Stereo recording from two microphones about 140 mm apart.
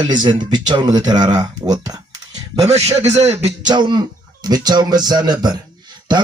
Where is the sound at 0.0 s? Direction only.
35° right (ahead or behind).